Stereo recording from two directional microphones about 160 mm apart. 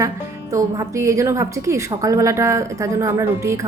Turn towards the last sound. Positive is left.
turn(degrees=-15)  # may be behind; listen again after turning